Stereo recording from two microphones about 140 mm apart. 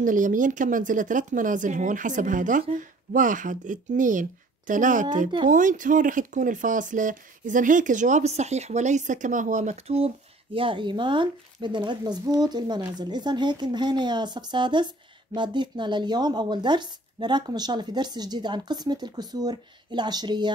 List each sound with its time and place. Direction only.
0.0 s speech: 70° right (ahead or behind); by 20.5 s 30° right (ahead or behind)